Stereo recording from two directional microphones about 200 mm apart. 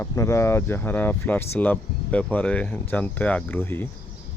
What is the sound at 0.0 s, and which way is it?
Speech, 15° left (ahead or behind).